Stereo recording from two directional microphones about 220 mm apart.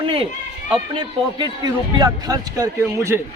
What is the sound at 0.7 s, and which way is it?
Speech, 20° right (ahead or behind).